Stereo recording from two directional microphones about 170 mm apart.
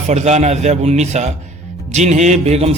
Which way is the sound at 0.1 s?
40° right (ahead or behind).